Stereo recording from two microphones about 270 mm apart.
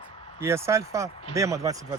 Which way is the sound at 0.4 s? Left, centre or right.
Centre.